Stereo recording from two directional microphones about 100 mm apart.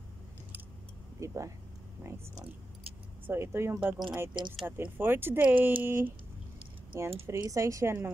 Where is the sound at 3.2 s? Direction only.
25° right (ahead or behind).